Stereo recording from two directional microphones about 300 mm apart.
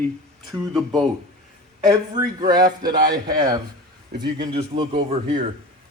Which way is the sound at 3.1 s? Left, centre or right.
Centre.